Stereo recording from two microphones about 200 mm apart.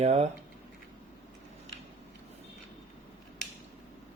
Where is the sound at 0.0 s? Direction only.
35° right (ahead or behind).